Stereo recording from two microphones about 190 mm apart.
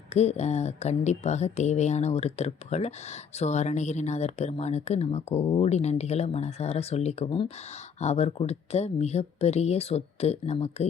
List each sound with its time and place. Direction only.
0.1 s speech: 35° left (ahead or behind)